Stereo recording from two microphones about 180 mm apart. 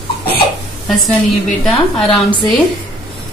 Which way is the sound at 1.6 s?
5° left (ahead or behind).